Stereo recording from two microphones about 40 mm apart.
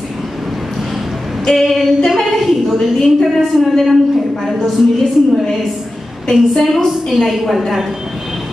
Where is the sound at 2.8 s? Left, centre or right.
Centre.